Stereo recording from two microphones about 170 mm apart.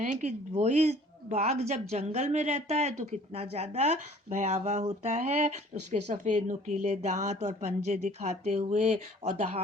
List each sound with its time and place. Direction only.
0.0 s speech: 45° right (ahead or behind)